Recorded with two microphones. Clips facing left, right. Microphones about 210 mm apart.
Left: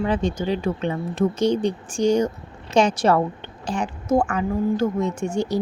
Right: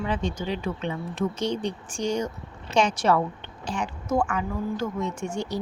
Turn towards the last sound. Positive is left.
turn(degrees=35)  # may be behind; listen again after turning